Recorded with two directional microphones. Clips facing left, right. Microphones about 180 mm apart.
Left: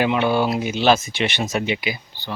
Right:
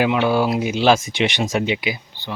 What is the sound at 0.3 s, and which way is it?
Speech, 5° right (ahead or behind).